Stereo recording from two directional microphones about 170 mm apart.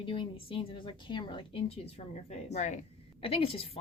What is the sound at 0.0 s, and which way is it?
A woman's voice, 30° left (ahead or behind).